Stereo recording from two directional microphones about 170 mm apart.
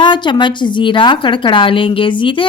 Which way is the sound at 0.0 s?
25° left (ahead or behind).